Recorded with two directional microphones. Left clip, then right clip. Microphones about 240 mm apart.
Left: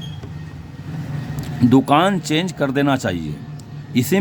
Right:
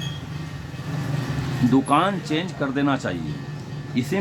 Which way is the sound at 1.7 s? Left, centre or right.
Left.